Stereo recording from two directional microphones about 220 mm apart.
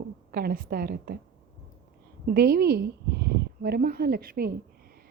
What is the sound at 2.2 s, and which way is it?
A woman's voice, 45° right (ahead or behind).